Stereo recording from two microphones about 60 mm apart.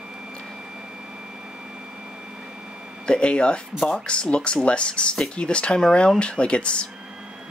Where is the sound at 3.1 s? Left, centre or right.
Centre.